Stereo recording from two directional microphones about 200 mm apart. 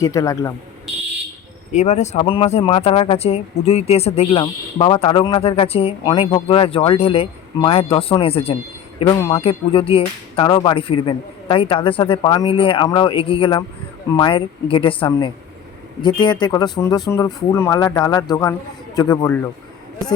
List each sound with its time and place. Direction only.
0.0 s speech: 15° left (ahead or behind)
1.7 s speech: 35° left (ahead or behind); by 19.4 s 15° left (ahead or behind)